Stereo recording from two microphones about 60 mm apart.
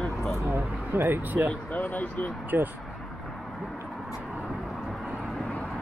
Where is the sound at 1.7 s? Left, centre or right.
Left.